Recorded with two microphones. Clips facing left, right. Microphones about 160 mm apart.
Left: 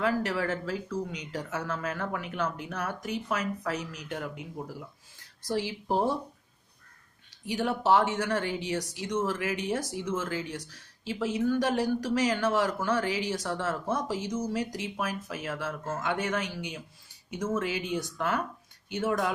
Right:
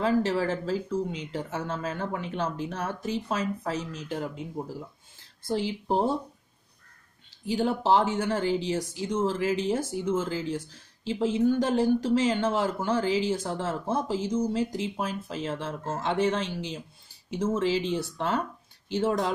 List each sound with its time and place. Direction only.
0.0 s speech: 30° right (ahead or behind)
5.5 s speech: 25° right (ahead or behind)
7.4 s speech: 25° right (ahead or behind)